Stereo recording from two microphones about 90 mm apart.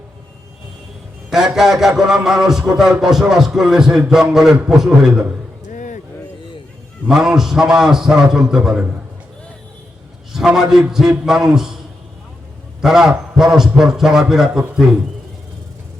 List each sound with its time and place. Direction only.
1.3 s a man's voice: 5° right (ahead or behind)
7.1 s a man's voice: 5° right (ahead or behind)
10.3 s a man's voice: 5° right (ahead or behind)
12.8 s a man's voice: 5° right (ahead or behind)